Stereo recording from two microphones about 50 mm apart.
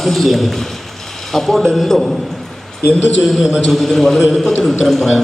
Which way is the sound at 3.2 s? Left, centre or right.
Centre.